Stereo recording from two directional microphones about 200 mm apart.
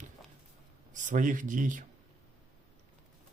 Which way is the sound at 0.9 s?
40° right (ahead or behind).